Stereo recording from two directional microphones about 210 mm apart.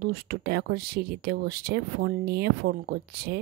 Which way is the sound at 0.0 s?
45° right (ahead or behind).